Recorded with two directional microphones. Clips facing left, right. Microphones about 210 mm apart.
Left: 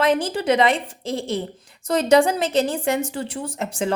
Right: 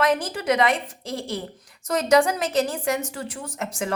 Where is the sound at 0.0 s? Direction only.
30° left (ahead or behind).